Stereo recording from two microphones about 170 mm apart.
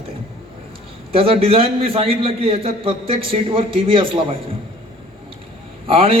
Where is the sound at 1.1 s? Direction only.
35° right (ahead or behind).